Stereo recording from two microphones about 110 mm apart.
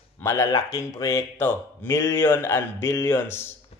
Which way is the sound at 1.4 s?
20° left (ahead or behind).